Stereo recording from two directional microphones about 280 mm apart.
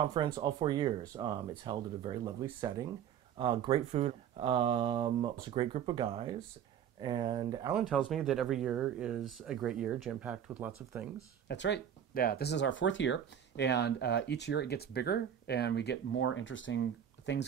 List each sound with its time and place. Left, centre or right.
0.0 s speech: centre
7.7 s speech: centre
11.4 s speech: left